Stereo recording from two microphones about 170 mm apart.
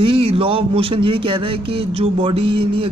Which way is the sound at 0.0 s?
30° right (ahead or behind).